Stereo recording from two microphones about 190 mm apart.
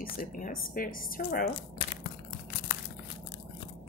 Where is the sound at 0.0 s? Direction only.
50° left (ahead or behind).